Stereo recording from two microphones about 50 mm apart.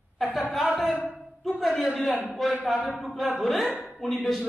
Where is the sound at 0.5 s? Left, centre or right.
Centre.